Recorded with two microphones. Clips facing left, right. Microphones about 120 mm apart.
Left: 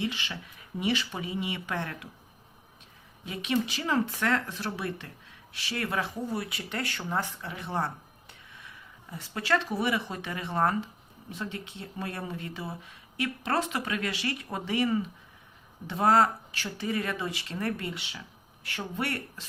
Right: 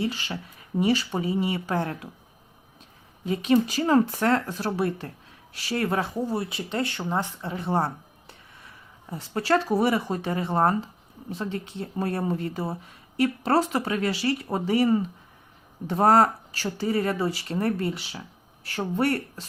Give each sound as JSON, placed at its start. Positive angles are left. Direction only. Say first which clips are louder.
{"t": 0.0, "sound": "speech", "louder": "right 4 dB", "side_deg": -40}
{"t": 3.2, "sound": "speech", "louder": "right 8 dB", "side_deg": -40}
{"t": 7.5, "sound": "speech", "louder": "right 6 dB", "side_deg": -35}